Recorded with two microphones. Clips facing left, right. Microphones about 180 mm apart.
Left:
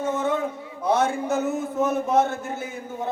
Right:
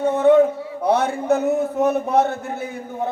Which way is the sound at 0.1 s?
60° right (ahead or behind).